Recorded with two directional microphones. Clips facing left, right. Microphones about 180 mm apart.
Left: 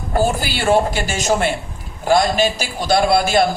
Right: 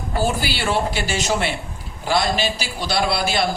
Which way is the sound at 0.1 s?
45° left (ahead or behind).